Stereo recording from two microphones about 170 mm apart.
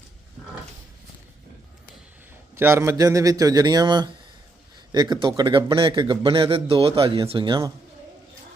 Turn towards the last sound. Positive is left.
turn(degrees=-25)  # may be behind; listen again after turning